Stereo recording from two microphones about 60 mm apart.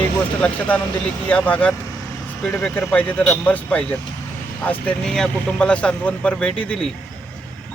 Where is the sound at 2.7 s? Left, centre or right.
Left.